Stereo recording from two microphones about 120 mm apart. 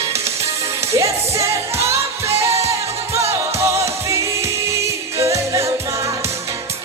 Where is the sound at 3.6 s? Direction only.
25° right (ahead or behind).